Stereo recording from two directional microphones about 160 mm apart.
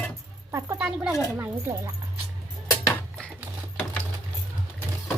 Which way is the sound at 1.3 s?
15° right (ahead or behind).